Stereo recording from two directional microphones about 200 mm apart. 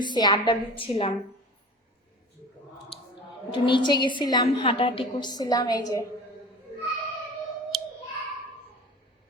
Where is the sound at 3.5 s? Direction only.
25° left (ahead or behind).